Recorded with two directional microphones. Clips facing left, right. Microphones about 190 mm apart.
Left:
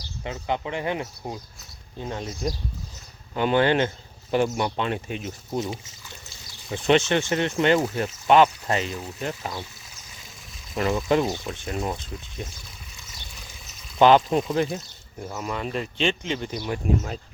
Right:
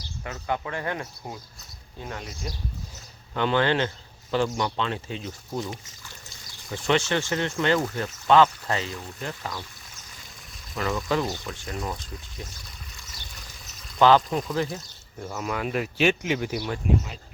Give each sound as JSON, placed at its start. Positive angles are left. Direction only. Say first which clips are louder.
{"t": 0.3, "sound": "speech", "louder": "left 2 dB", "side_deg": 20}
{"t": 3.3, "sound": "speech", "louder": "left 3 dB", "side_deg": 15}
{"t": 10.8, "sound": "speech", "louder": "left 4 dB", "side_deg": 25}
{"t": 14.0, "sound": "speech", "louder": "left 2 dB", "side_deg": 20}
{"t": 15.3, "sound": "speech", "louder": "right 1 dB", "side_deg": 0}
{"t": 16.8, "sound": "speech", "louder": "even", "side_deg": 40}